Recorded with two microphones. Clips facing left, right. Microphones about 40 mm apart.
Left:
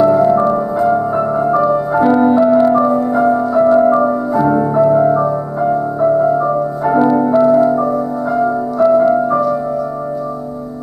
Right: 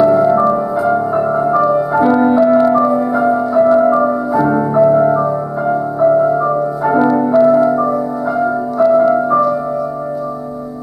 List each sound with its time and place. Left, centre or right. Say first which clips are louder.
0.0 s music: even; centre